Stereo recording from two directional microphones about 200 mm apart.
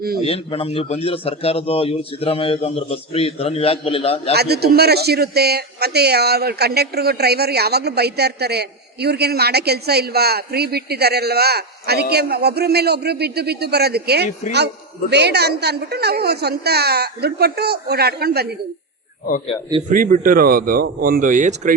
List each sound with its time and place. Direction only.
0.2 s a man's voice: 30° left (ahead or behind)
4.4 s a man's voice: 55° right (ahead or behind)
19.9 s a man's voice: 45° right (ahead or behind)